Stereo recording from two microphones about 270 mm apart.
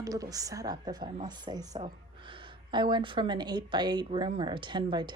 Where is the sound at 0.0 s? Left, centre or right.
Centre.